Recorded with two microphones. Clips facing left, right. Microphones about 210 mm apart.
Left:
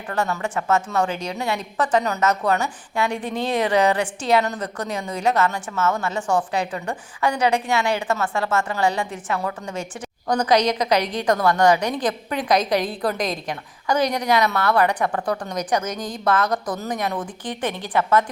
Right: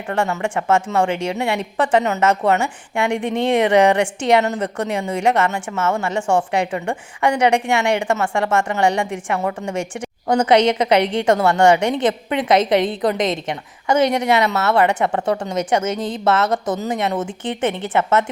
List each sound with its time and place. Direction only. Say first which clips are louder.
0.1 s a woman's voice: right 3 dB; 25° right (ahead or behind)
3.1 s speech: right 6 dB; 70° right (ahead or behind)
3.3 s a woman's voice: right 6 dB; 25° right (ahead or behind)